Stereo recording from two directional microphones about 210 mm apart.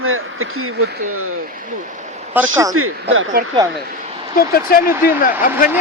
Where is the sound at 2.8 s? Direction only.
90° right.